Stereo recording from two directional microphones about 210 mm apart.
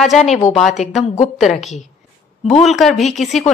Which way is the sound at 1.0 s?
35° left (ahead or behind).